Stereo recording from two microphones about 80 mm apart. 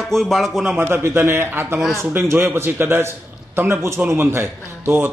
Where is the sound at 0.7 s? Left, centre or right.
Right.